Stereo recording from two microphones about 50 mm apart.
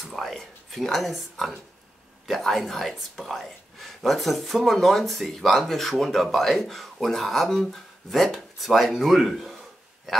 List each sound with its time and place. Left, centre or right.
0.0 s speech: centre